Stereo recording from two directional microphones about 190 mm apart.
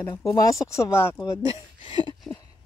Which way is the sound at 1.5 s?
30° left (ahead or behind).